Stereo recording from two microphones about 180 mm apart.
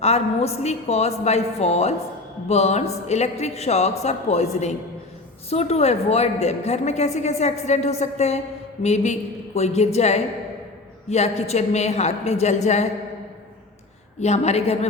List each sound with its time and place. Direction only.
0.0 s a woman's voice: 35° left (ahead or behind)
5.5 s a woman's voice: 35° left (ahead or behind)
14.2 s a woman's voice: 40° left (ahead or behind)